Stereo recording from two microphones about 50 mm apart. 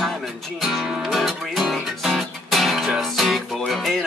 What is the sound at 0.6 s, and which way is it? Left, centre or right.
Music, centre.